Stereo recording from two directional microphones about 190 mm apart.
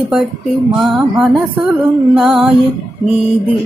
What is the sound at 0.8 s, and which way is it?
Speech, 5° right (ahead or behind).